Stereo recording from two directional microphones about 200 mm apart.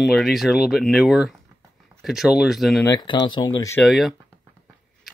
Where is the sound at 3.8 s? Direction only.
Centre (ahead or behind).